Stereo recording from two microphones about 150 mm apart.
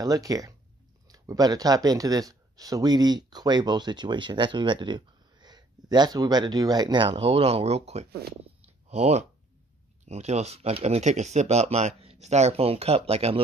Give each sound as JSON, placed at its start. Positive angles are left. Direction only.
{"t": 0.0, "sound": "speech", "side_deg": -25}
{"t": 7.1, "sound": "speech", "side_deg": -40}
{"t": 8.1, "sound": "speech", "side_deg": -90}
{"t": 8.8, "sound": "speech", "side_deg": -45}